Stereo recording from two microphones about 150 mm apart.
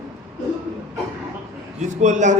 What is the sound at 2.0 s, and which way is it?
Speech, 55° right (ahead or behind).